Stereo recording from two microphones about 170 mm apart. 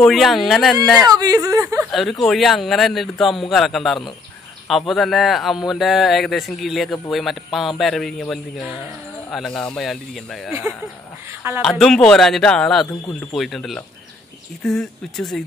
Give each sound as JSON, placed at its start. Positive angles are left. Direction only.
{"t": 0.0, "sound": "speech", "side_deg": 0}
{"t": 1.0, "sound": "speech", "side_deg": -20}
{"t": 1.9, "sound": "speech", "side_deg": 0}
{"t": 11.4, "sound": "a woman's voice", "side_deg": -15}
{"t": 11.8, "sound": "speech", "side_deg": 5}